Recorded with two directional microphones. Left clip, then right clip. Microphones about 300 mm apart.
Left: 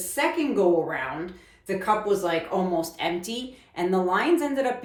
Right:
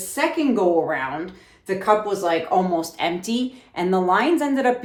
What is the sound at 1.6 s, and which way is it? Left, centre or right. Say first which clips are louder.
Speech: right 4 dB; right.